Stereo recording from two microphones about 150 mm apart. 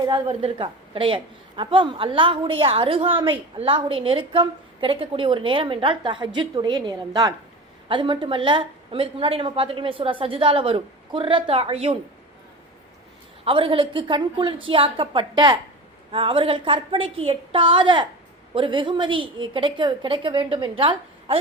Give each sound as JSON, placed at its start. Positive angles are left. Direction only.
{"t": 0.3, "sound": "a woman's voice", "side_deg": -35}
{"t": 13.4, "sound": "a woman's voice", "side_deg": -35}